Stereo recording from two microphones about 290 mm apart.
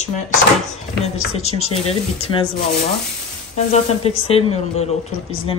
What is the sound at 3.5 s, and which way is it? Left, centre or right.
Speech, left.